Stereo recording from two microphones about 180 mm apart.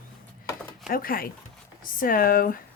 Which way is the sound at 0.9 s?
55° left (ahead or behind).